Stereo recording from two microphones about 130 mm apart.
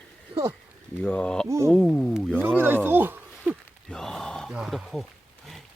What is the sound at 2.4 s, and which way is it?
Speech, 15° right (ahead or behind).